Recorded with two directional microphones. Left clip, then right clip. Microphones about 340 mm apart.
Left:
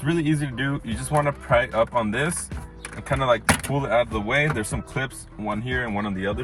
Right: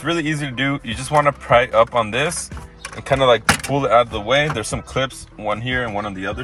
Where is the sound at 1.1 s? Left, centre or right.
Right.